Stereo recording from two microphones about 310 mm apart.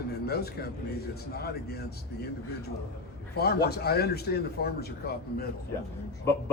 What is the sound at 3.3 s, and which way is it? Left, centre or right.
Speech, left.